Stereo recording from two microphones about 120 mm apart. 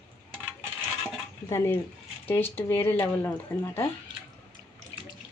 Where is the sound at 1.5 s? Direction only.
20° left (ahead or behind).